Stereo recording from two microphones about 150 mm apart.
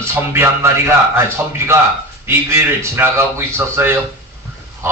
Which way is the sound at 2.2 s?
15° right (ahead or behind).